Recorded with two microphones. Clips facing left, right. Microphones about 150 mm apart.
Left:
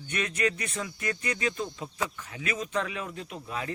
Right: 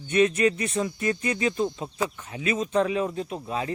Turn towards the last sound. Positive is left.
turn(degrees=-25)  # may be behind; listen again after turning